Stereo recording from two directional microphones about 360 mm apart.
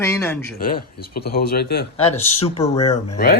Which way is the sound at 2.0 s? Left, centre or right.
Centre.